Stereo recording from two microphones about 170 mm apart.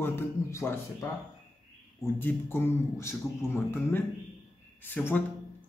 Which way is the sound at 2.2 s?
15° left (ahead or behind).